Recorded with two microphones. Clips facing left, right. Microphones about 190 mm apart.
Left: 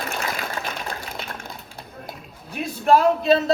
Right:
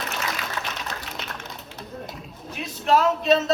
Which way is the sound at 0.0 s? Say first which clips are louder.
Left 2 dB; 50° left (ahead or behind).